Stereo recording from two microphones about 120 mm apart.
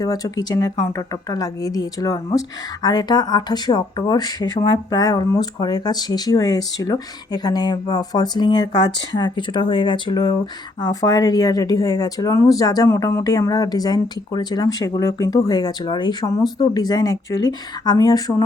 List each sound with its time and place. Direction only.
0.0 s speech: 30° left (ahead or behind)